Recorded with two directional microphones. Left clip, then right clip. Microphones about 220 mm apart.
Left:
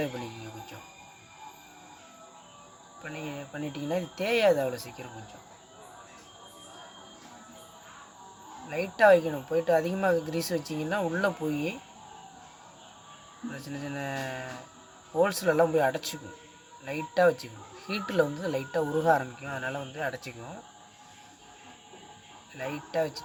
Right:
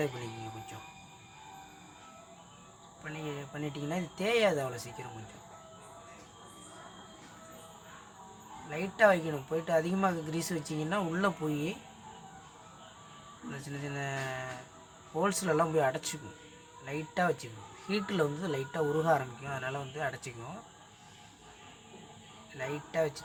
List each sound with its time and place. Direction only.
3.0 s speech: 15° left (ahead or behind)
8.7 s speech: 15° left (ahead or behind)
13.8 s speech: 15° left (ahead or behind)
22.5 s speech: 15° left (ahead or behind)